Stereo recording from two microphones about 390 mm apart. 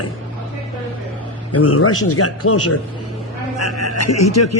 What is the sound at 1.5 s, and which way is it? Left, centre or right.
Speech, left.